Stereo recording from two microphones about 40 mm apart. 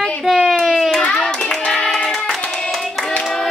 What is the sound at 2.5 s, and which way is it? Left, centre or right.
Hands, centre.